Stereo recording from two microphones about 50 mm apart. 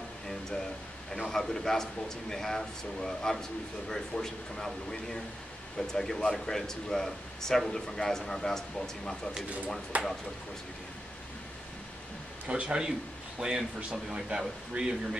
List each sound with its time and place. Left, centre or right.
1.1 s speech: centre
9.9 s speech: right
12.4 s speech: right